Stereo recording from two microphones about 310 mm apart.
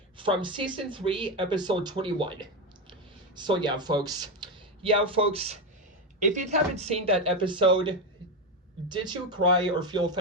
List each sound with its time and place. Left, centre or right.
0.2 s speech: centre